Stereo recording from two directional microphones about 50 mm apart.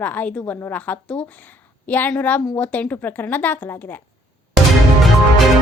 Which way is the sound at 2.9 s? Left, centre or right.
Left.